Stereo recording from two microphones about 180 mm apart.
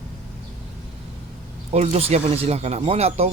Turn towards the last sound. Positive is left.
turn(degrees=-35)  # may be behind; listen again after turning